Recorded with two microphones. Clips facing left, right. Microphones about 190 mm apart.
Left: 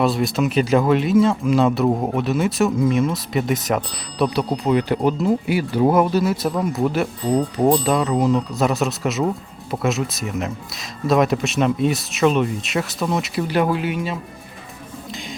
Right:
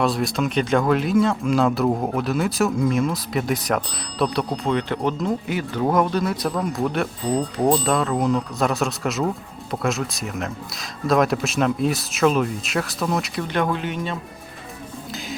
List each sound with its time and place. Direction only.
0.0 s speech: centre (ahead or behind)